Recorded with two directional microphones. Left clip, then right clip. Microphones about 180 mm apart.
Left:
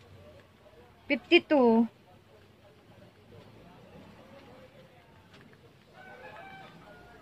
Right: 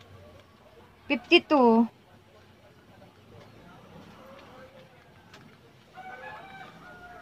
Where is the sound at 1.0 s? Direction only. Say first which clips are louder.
Right 2 dB; 10° left (ahead or behind).